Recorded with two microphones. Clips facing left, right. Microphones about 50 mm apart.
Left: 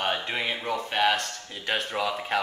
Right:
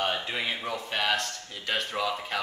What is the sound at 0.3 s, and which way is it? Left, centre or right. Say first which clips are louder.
Speech: left 2 dB; centre.